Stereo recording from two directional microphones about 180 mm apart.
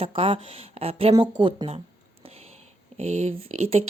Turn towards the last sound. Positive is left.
turn(degrees=-35)  # may be behind; listen again after turning